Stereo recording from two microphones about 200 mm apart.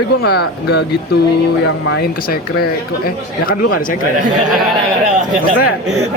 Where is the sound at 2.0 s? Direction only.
50° left (ahead or behind).